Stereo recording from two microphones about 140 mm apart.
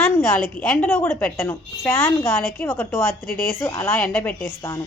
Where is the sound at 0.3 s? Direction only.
15° left (ahead or behind).